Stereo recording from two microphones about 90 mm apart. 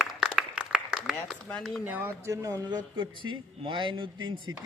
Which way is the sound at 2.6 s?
55° right (ahead or behind).